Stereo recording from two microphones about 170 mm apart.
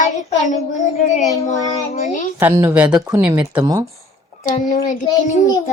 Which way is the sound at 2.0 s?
50° left (ahead or behind).